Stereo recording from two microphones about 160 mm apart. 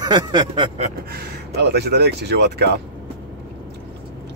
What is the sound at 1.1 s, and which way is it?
Speech, 75° right (ahead or behind).